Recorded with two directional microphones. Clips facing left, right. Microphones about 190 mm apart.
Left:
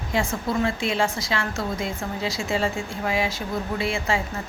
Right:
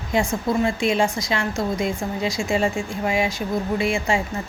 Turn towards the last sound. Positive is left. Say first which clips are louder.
# right 4 dB
turn(degrees=-15)  # may be behind; listen again after turning